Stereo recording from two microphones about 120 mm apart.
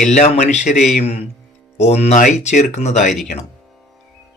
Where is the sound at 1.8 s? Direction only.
65° left (ahead or behind).